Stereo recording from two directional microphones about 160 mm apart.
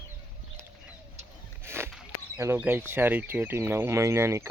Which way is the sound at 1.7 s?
15° right (ahead or behind).